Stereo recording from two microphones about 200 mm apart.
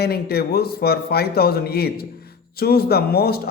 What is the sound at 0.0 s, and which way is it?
A man's voice, 50° left (ahead or behind).